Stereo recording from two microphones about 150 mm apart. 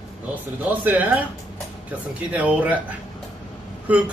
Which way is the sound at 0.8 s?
10° right (ahead or behind).